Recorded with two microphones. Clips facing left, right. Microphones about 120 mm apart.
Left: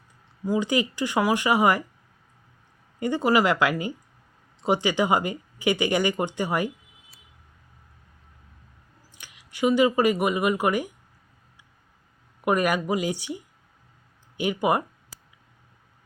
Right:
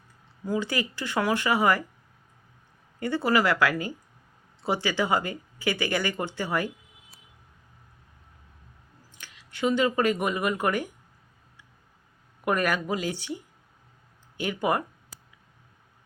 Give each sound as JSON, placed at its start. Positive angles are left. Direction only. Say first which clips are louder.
{"t": 0.4, "sound": "speech", "louder": "left 4 dB", "side_deg": 15}
{"t": 3.0, "sound": "speech", "louder": "left 3 dB", "side_deg": 15}
{"t": 9.1, "sound": "speech", "louder": "left 1 dB", "side_deg": 15}
{"t": 12.5, "sound": "speech", "louder": "left 3 dB", "side_deg": 15}
{"t": 14.3, "sound": "speech", "louder": "left 3 dB", "side_deg": 15}